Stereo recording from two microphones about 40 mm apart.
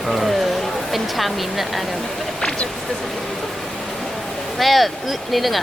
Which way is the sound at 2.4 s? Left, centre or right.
Left.